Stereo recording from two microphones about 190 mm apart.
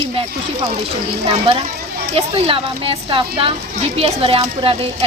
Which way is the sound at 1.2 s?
30° right (ahead or behind).